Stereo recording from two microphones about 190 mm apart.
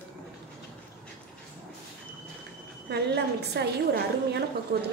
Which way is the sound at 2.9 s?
60° right (ahead or behind).